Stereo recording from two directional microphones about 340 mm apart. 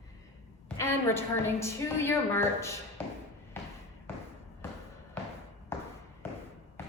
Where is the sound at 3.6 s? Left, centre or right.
Centre.